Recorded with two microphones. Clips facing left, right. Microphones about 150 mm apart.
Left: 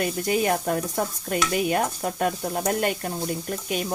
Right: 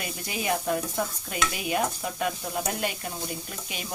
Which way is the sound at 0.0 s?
50° left (ahead or behind).